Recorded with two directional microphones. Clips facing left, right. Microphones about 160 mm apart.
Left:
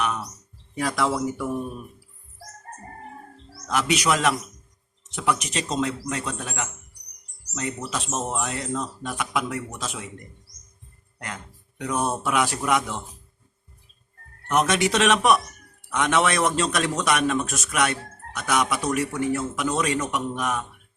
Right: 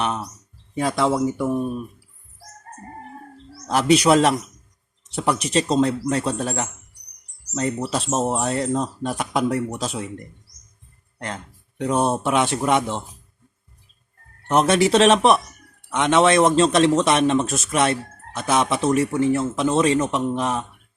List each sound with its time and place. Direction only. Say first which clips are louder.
0.0 s a sound: right 2 dB; 30° right (ahead or behind)
0.8 s a man's voice: right 4 dB; 25° right (ahead or behind)
3.7 s speech: right 7 dB; 30° right (ahead or behind)
11.8 s a man's voice: right 5 dB; 25° right (ahead or behind)
14.4 s a man's voice: right 5 dB; 30° right (ahead or behind)